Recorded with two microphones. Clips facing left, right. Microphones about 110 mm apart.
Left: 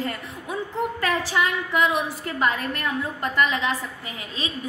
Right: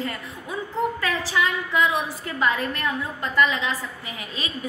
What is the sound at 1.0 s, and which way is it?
A woman's voice, 50° left (ahead or behind).